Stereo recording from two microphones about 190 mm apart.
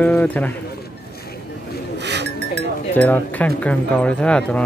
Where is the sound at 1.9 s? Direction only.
65° right (ahead or behind).